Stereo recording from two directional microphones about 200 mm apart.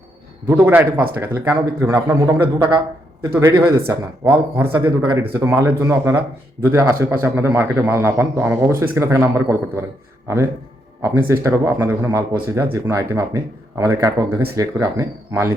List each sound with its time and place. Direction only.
0.4 s a man's voice: 10° right (ahead or behind)
3.8 s a man's voice: 10° right (ahead or behind)